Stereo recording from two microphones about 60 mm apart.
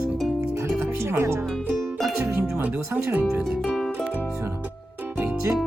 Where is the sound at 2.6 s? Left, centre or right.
Right.